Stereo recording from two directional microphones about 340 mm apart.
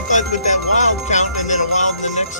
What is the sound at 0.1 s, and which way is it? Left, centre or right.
Music, left.